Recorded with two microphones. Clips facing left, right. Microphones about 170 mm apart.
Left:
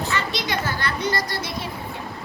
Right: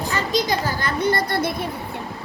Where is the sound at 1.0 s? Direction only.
55° right (ahead or behind).